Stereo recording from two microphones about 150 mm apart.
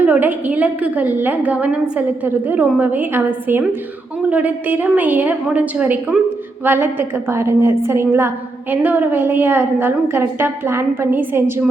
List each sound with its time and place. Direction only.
0.0 s a woman's voice: 10° right (ahead or behind)